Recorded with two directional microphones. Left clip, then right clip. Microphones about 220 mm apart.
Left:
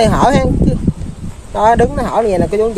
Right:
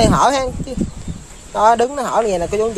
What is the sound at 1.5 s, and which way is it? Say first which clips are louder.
Speech: left 2 dB; centre (ahead or behind).